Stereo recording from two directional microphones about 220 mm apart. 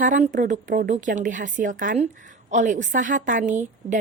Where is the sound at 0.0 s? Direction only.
35° right (ahead or behind).